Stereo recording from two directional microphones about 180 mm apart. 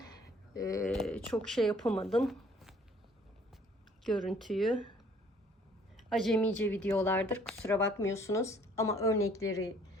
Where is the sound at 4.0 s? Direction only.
Centre (ahead or behind).